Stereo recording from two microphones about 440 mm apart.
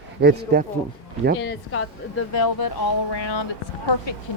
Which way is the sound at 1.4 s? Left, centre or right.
Left.